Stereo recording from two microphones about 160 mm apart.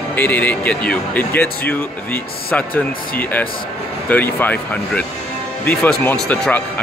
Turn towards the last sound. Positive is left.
turn(degrees=10)  # may be behind; listen again after turning